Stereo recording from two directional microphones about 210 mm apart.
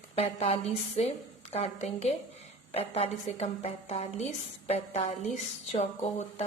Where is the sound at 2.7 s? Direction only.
30° left (ahead or behind).